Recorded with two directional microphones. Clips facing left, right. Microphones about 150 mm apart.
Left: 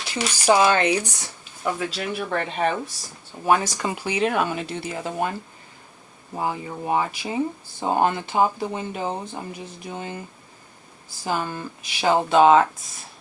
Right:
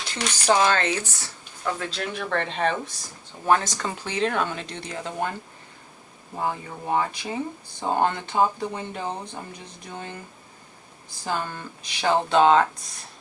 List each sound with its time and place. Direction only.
0.1 s speech: 10° left (ahead or behind)
6.3 s speech: 10° left (ahead or behind)
11.3 s speech: 10° left (ahead or behind)